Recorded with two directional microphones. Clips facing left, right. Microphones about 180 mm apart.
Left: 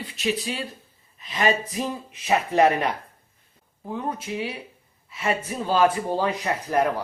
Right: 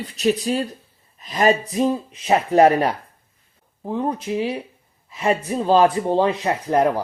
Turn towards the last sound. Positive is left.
turn(degrees=-30)  # may be behind; listen again after turning